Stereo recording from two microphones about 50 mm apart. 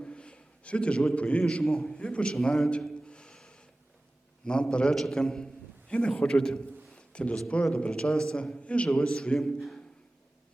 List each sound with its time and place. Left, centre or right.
0.0 s a sound: left
1.1 s a man's voice: left
1.6 s a man's voice: centre
2.3 s a sound: centre
4.4 s a man's voice: centre
9.6 s a man's voice: centre